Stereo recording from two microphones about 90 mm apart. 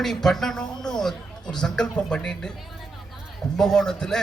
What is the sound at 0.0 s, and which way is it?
A man's voice, 5° left (ahead or behind).